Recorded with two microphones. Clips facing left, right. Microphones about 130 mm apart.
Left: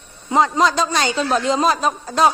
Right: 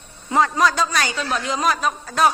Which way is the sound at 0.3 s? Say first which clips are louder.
Left 2 dB; 20° left (ahead or behind).